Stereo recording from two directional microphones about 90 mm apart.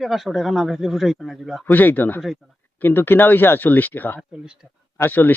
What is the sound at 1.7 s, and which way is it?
Speech, 20° left (ahead or behind).